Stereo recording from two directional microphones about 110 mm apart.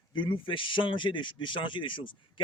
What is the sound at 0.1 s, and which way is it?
A man's voice, 50° left (ahead or behind).